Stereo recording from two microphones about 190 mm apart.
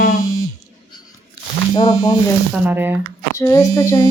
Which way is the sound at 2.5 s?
10° right (ahead or behind).